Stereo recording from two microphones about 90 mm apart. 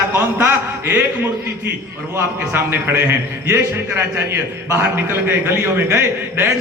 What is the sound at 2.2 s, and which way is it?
A man's voice, 30° right (ahead or behind).